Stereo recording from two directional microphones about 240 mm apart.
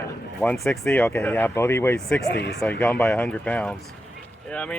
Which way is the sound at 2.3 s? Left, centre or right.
Left.